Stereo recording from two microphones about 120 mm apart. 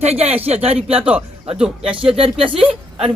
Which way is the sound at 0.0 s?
60° right (ahead or behind).